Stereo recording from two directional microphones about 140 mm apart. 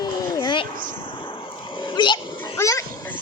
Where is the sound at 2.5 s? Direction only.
25° left (ahead or behind).